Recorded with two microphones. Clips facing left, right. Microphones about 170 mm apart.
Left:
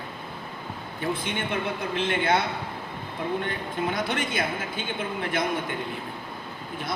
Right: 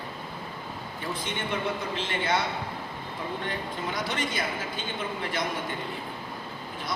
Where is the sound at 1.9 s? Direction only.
55° left (ahead or behind).